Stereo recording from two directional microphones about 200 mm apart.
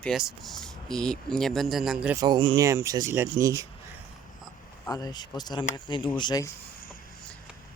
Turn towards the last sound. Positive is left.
turn(degrees=20)  # may be behind; listen again after turning